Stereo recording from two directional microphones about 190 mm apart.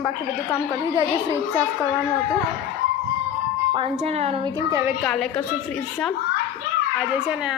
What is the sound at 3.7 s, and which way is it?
Speech, 30° right (ahead or behind).